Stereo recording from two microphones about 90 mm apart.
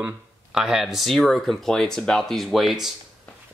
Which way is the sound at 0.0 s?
10° right (ahead or behind).